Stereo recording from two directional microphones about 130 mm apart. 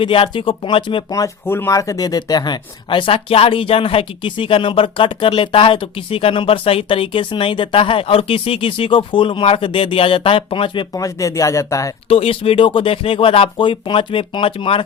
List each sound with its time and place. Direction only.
0.0 s speech: 40° left (ahead or behind)
1.1 s speech: 20° left (ahead or behind); by 10.8 s 40° left (ahead or behind)
10.9 s speech: 25° left (ahead or behind)
12.0 s speech: 45° left (ahead or behind)